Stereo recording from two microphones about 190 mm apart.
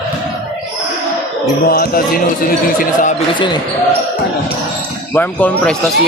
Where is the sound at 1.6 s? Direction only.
50° left (ahead or behind).